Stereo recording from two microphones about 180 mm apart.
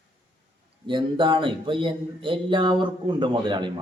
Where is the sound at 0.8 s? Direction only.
25° right (ahead or behind).